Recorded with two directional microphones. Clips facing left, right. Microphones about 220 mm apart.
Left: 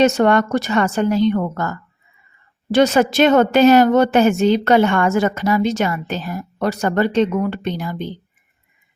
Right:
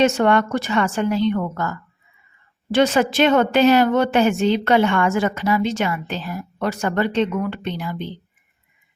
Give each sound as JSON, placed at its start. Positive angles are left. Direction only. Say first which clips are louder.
{"t": 0.0, "sound": "a woman's voice", "louder": "left 2 dB", "side_deg": 40}